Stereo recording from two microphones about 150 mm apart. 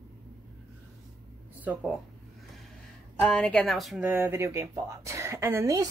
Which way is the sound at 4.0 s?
15° right (ahead or behind).